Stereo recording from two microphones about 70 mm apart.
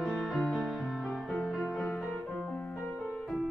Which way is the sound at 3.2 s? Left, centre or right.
Centre.